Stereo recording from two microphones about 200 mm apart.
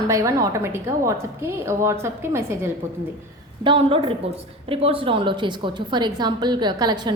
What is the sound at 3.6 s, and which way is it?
A woman's voice, 25° right (ahead or behind).